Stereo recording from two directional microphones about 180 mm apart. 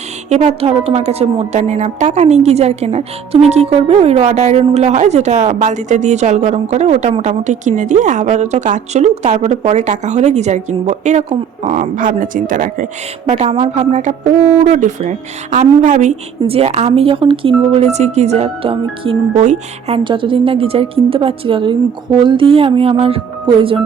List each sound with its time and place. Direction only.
0.3 s a woman's voice: 35° right (ahead or behind)